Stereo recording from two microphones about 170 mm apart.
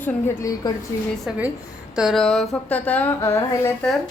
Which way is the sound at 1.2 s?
10° right (ahead or behind).